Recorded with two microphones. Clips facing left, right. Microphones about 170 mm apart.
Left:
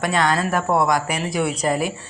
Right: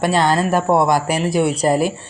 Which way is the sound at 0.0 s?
30° right (ahead or behind).